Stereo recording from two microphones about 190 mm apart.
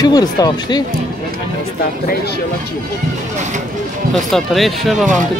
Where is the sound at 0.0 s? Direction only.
20° left (ahead or behind).